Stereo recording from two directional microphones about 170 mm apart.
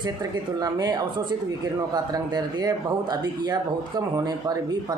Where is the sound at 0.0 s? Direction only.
25° right (ahead or behind).